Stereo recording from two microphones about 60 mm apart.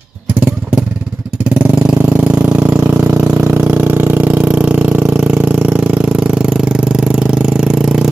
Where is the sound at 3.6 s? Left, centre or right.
Right.